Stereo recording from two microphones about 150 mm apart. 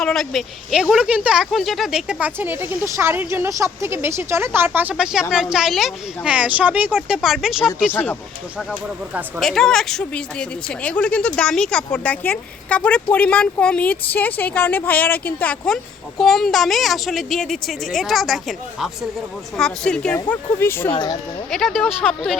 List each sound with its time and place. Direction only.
0.0 s speech: 5° left (ahead or behind)
9.4 s speech: 5° left (ahead or behind)
20.9 s speech: 30° left (ahead or behind)
21.5 s speech: centre (ahead or behind)